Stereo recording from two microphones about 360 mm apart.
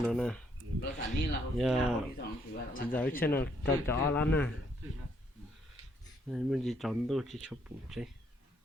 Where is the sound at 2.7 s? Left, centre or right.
Left.